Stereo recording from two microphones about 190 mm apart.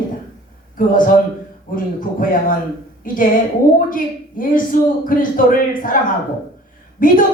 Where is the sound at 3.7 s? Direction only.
45° left (ahead or behind).